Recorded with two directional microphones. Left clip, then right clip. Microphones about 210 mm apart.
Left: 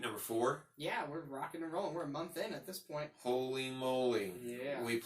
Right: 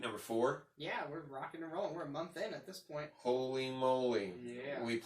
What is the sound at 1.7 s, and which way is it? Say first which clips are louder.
Speech: even; 15° left (ahead or behind).